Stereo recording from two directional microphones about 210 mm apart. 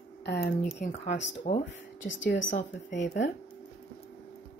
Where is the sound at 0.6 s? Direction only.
35° left (ahead or behind).